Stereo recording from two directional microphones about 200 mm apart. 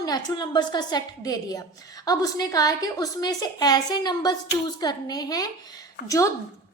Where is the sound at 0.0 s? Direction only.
20° left (ahead or behind).